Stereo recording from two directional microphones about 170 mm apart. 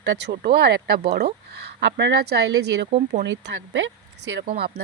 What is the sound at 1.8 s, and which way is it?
Speech, 90° right.